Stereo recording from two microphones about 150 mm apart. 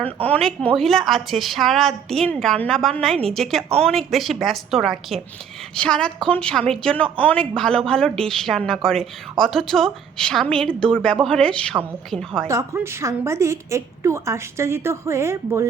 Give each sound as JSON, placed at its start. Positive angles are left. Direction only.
{"t": 0.2, "sound": "speech", "side_deg": 5}
{"t": 12.5, "sound": "a woman's voice", "side_deg": -20}